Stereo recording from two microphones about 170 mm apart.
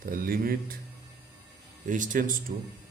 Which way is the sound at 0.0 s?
60° right (ahead or behind).